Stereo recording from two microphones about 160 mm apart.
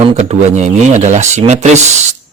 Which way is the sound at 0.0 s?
40° right (ahead or behind).